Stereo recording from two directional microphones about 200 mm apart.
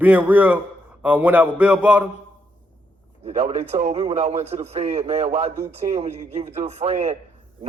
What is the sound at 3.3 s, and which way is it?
A man's voice, 30° right (ahead or behind).